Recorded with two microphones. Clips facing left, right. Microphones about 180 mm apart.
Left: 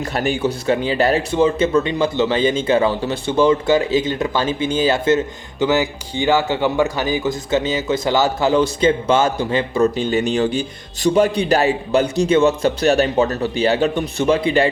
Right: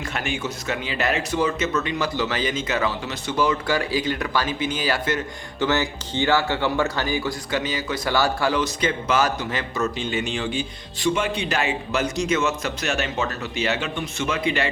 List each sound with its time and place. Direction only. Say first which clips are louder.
0.0 s speech: left 8 dB; 35° left (ahead or behind)